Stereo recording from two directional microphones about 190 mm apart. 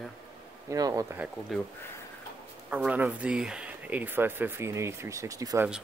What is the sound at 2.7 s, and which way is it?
Speech, 10° right (ahead or behind).